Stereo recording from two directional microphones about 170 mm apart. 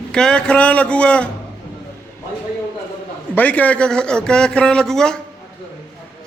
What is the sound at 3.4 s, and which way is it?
A man's voice, 10° left (ahead or behind).